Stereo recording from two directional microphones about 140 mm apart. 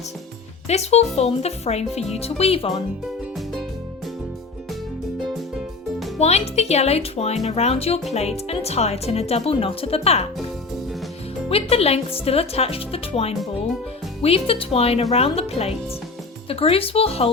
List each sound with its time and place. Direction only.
0.7 s speech: 50° left (ahead or behind)
3.3 s music: centre (ahead or behind)
6.1 s speech: 50° left (ahead or behind)
11.4 s speech: 45° left (ahead or behind)